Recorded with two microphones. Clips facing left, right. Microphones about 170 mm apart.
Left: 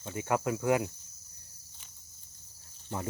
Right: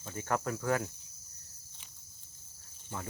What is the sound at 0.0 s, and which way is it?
Speech, 10° left (ahead or behind).